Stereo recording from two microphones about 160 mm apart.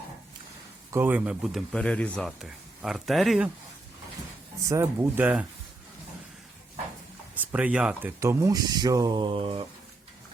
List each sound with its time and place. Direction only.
0.9 s speech: 10° right (ahead or behind)
1.7 s speech: 5° left (ahead or behind)
4.7 s speech: 15° right (ahead or behind)
7.3 s speech: 10° right (ahead or behind)
8.2 s speech: 20° right (ahead or behind); by 9.6 s 35° right (ahead or behind)